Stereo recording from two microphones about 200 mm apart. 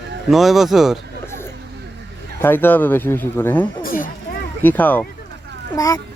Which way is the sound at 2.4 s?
10° left (ahead or behind).